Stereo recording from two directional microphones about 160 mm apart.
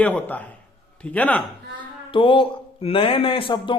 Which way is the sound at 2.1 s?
35° left (ahead or behind).